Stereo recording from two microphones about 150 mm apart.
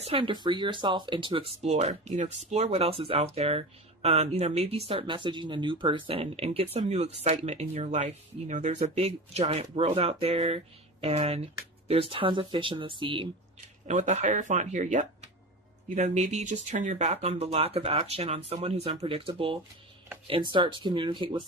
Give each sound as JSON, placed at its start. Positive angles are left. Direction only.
{"t": 0.0, "sound": "speech", "side_deg": -35}
{"t": 13.8, "sound": "speech", "side_deg": -50}
{"t": 19.0, "sound": "speech", "side_deg": -35}